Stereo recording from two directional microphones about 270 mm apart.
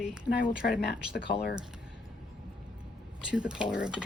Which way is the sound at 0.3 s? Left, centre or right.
Left.